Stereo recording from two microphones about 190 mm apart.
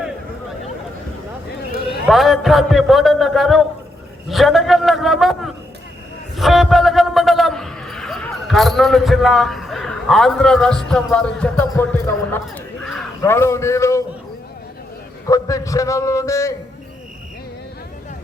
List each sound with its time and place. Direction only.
2.0 s a man's voice: centre (ahead or behind)
12.8 s a sound: centre (ahead or behind)
13.2 s a man's voice: 15° left (ahead or behind)
15.3 s a man's voice: 15° left (ahead or behind)